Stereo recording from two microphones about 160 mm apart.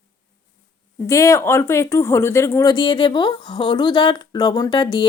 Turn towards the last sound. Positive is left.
turn(degrees=30)  # may be behind; listen again after turning